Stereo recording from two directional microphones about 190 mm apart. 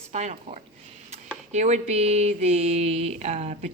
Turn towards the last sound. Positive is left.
turn(degrees=-35)  # may be behind; listen again after turning